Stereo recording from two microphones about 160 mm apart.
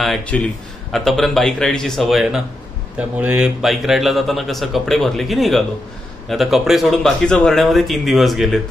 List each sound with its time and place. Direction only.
0.0 s a man's voice: centre (ahead or behind)